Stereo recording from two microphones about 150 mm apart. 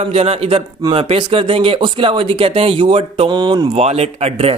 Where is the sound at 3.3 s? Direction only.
30° right (ahead or behind).